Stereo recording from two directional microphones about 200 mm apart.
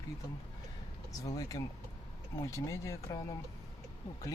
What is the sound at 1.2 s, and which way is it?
Speech, 15° left (ahead or behind).